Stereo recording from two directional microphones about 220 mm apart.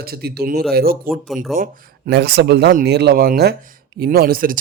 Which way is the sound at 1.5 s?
45° right (ahead or behind).